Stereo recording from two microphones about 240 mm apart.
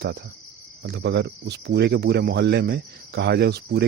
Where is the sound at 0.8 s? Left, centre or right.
Right.